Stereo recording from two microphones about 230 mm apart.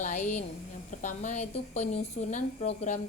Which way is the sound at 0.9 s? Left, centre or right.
Left.